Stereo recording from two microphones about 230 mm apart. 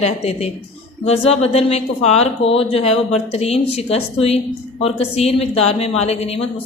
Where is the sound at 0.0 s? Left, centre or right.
Left.